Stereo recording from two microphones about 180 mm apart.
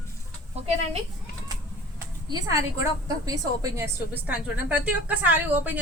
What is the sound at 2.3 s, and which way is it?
A woman's voice, 20° right (ahead or behind).